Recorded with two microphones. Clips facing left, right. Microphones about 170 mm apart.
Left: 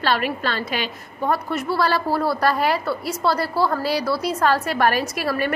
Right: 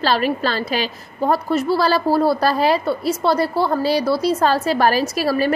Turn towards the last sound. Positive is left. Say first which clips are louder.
# right 5 dB
turn(degrees=-30)  # may be behind; listen again after turning